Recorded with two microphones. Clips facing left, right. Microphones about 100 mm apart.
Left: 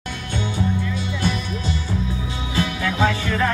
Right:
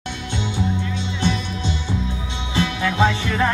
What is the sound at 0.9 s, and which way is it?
Music, 25° right (ahead or behind).